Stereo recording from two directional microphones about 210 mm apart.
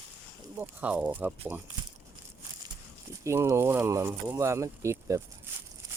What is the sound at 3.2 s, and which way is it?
Speech, 15° right (ahead or behind).